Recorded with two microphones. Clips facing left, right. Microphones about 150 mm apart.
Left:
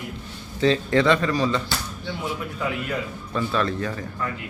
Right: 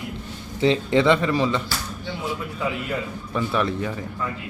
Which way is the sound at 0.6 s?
20° right (ahead or behind).